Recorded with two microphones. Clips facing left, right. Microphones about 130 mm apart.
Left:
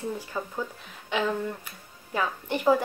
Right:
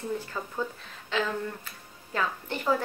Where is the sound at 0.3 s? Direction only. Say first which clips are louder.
Left 1 dB; 15° left (ahead or behind).